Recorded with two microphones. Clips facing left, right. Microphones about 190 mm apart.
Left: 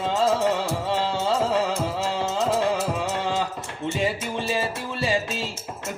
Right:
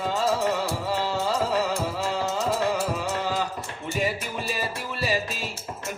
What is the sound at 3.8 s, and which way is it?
Music, 25° left (ahead or behind).